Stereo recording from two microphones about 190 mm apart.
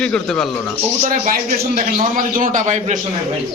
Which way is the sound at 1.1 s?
45° right (ahead or behind).